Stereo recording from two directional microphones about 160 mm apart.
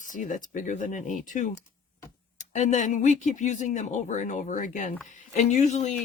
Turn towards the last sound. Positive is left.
turn(degrees=45)  # may be behind; listen again after turning